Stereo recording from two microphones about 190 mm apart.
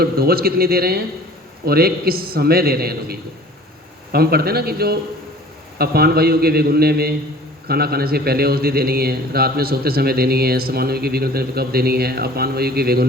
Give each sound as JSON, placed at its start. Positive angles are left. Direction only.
{"t": 0.0, "sound": "a man's voice", "side_deg": -55}